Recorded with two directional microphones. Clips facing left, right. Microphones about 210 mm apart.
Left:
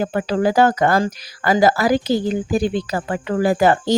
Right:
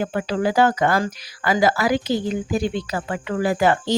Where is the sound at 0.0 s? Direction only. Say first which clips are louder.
Left 3 dB; 40° left (ahead or behind).